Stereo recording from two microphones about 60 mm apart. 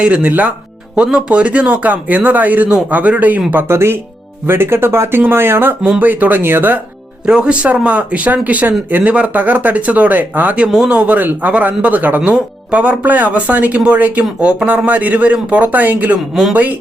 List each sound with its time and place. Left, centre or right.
0.0 s speech: centre
3.5 s speech: right
6.0 s speech: right
7.3 s speech: centre
7.6 s speech: right
10.7 s speech: centre
10.9 s speech: right
16.3 s speech: centre